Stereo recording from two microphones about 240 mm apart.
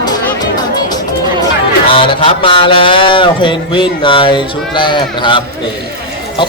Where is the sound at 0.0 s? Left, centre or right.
Centre.